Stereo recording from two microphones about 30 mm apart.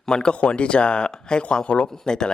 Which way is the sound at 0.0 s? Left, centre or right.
Left.